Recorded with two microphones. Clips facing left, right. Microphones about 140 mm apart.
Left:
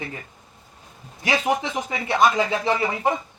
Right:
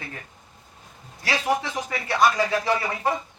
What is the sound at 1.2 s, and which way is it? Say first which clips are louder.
Speech: left 2 dB; 20° left (ahead or behind).